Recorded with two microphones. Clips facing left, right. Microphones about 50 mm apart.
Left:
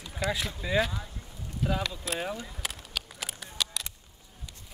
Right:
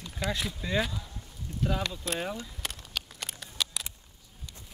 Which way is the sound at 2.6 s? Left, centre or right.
Centre.